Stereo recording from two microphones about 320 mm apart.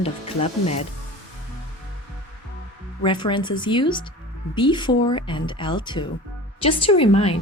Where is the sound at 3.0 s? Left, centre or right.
Centre.